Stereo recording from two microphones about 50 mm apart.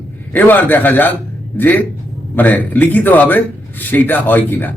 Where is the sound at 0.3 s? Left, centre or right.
Left.